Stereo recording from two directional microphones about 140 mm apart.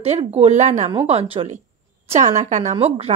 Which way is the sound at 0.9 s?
45° right (ahead or behind).